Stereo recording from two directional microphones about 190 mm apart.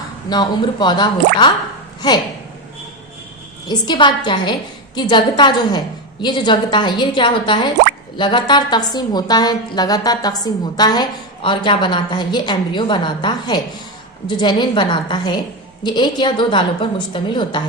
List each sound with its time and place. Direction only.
0.3 s a woman's voice: 25° left (ahead or behind)
3.7 s a woman's voice: 25° left (ahead or behind)